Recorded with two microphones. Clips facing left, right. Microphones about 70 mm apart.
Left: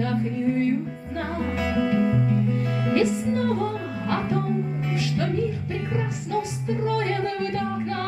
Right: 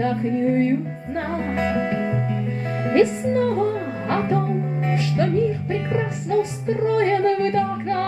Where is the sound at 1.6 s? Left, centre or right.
Right.